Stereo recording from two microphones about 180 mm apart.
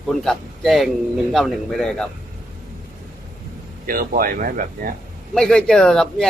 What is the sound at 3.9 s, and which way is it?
Speech, 55° right (ahead or behind).